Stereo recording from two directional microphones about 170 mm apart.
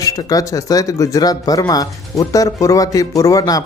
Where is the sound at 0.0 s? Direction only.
20° left (ahead or behind).